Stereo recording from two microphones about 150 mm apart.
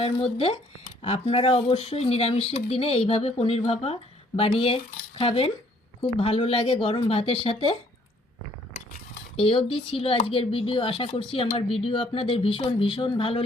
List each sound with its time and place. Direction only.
0.0 s speech: 40° left (ahead or behind)
9.3 s speech: 35° left (ahead or behind)